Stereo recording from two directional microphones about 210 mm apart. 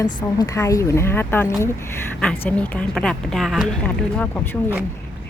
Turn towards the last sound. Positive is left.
turn(degrees=10)  # may be behind; listen again after turning